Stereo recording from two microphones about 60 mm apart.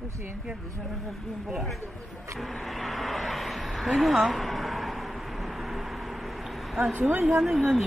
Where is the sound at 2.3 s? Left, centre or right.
Centre.